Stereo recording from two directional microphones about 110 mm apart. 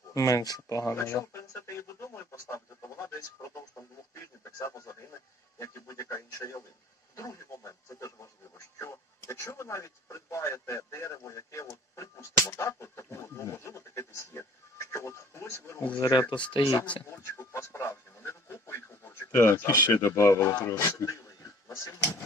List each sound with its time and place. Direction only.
0.1 s a sound: 30° left (ahead or behind)
4.1 s speech: 30° left (ahead or behind)
16.0 s speech: 40° left (ahead or behind)
17.1 s speech: 25° left (ahead or behind)